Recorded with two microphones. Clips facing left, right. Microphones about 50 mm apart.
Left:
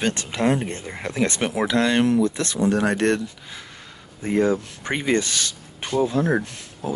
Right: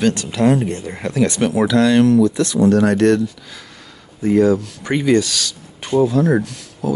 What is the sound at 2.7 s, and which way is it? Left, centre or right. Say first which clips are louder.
Speech: right 6 dB; centre.